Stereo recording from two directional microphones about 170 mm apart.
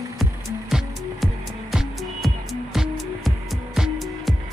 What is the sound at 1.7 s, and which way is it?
Music, centre (ahead or behind).